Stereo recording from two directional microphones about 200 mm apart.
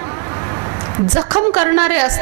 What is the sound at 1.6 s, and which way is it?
Speech, 15° right (ahead or behind).